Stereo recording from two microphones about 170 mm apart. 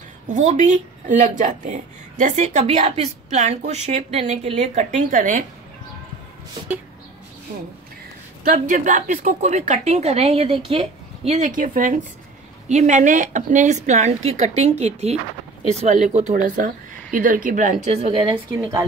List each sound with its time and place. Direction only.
0.3 s a woman's voice: 45° right (ahead or behind)
8.5 s a woman's voice: 50° right (ahead or behind)